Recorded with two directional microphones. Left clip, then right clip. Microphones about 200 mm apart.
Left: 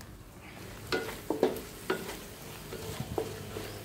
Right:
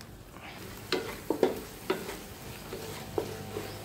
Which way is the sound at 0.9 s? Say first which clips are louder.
Right 1 dB; centre (ahead or behind).